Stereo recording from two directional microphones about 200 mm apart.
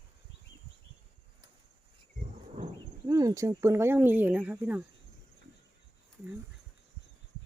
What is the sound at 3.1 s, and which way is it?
Speech, 15° right (ahead or behind).